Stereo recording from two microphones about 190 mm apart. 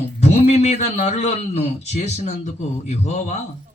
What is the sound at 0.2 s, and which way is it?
A man's voice, 35° left (ahead or behind).